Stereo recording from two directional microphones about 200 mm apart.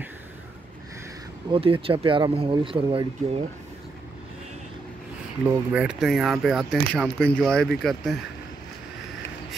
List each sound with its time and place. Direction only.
1.5 s speech: 25° right (ahead or behind)
5.7 s speech: 5° right (ahead or behind)